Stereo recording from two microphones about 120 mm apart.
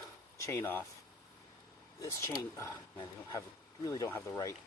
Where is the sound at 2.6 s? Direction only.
25° left (ahead or behind).